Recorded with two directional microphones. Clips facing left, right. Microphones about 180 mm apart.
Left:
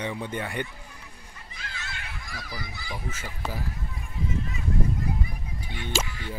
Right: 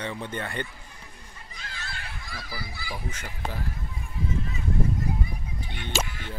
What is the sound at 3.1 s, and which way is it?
Speech, 5° left (ahead or behind).